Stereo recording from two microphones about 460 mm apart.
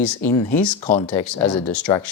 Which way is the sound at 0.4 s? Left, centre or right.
Left.